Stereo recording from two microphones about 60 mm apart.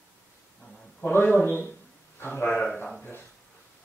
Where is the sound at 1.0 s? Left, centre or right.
Left.